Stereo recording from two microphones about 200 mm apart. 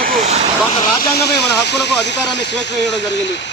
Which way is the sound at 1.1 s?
55° left (ahead or behind).